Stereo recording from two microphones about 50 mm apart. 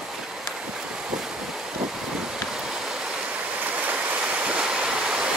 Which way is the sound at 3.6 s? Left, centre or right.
Right.